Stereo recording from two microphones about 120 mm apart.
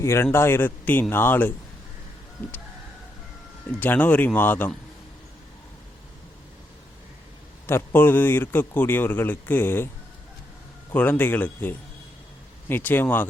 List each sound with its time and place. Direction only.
0.0 s speech: 20° left (ahead or behind)
3.7 s speech: 15° left (ahead or behind)
7.7 s speech: 20° left (ahead or behind)
10.9 s speech: 15° left (ahead or behind)